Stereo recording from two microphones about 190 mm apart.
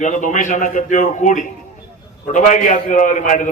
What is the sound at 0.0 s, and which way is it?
A man's voice, 40° left (ahead or behind).